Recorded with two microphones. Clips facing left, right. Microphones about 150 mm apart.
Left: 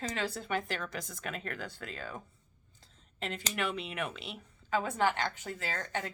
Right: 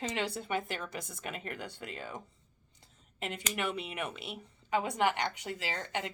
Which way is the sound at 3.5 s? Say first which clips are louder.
Even; 10° right (ahead or behind).